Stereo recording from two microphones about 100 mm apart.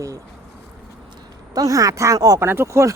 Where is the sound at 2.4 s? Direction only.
25° right (ahead or behind).